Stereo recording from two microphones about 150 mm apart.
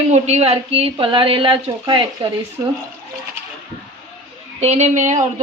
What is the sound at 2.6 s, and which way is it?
Speech, 20° right (ahead or behind).